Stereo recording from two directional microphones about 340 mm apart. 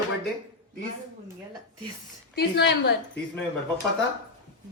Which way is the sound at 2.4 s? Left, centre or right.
Left.